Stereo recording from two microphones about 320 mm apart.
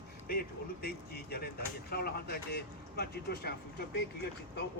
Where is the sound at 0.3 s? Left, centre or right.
Left.